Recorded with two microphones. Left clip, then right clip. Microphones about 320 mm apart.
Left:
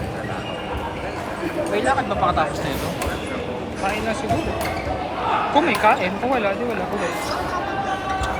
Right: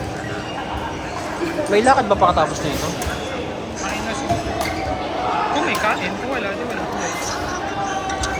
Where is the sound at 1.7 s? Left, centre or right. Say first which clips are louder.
Right 7 dB; centre.